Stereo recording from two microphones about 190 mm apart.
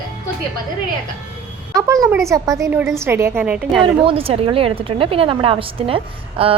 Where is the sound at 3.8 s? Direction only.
30° right (ahead or behind).